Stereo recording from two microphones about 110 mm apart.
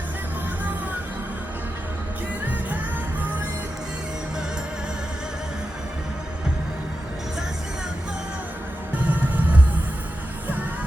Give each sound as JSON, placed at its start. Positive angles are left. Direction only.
{"t": 9.0, "sound": "music", "side_deg": -15}